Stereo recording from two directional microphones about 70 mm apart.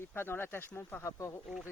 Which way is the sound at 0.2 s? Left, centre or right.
Left.